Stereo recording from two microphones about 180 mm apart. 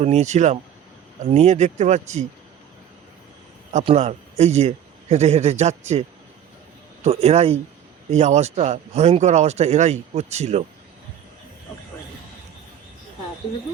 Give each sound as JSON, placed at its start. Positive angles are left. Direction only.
{"t": 0.0, "sound": "speech", "side_deg": -40}
{"t": 3.8, "sound": "a man's voice", "side_deg": -35}